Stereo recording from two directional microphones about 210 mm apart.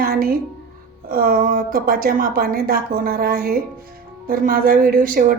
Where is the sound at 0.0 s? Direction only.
45° right (ahead or behind).